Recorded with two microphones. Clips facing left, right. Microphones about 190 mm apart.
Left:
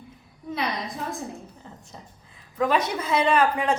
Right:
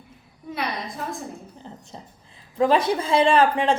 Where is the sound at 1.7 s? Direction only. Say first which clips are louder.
Right 4 dB; 30° right (ahead or behind).